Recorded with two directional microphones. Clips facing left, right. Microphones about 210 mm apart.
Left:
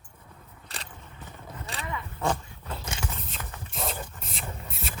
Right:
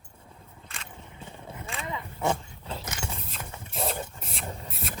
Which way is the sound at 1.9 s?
15° right (ahead or behind).